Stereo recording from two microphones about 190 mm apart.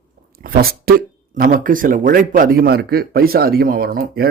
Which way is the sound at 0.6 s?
50° right (ahead or behind).